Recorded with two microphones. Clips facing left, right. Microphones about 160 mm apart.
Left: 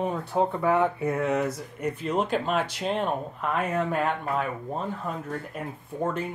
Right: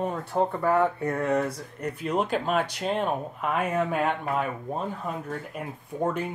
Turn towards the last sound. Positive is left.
turn(degrees=-5)  # may be behind; listen again after turning